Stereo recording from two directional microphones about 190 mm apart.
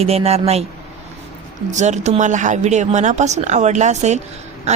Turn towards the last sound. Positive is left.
turn(degrees=-35)  # may be behind; listen again after turning